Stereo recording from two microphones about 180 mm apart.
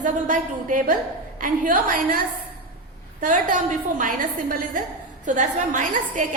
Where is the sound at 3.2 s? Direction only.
45° right (ahead or behind).